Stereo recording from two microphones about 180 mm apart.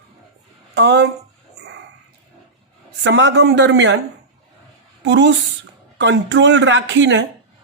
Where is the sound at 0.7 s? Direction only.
70° right (ahead or behind).